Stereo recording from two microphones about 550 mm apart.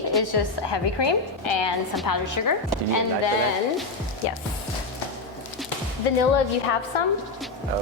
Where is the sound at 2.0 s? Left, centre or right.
Left.